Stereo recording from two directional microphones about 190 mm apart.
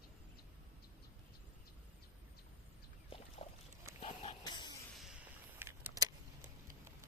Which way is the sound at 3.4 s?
30° left (ahead or behind).